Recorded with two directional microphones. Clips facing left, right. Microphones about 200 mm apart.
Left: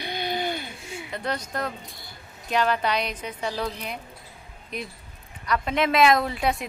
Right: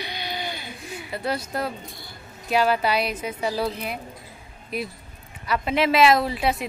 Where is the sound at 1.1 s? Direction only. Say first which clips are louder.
Right 3 dB; 5° right (ahead or behind).